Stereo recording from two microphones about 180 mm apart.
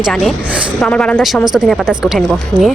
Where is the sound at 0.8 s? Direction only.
5° left (ahead or behind).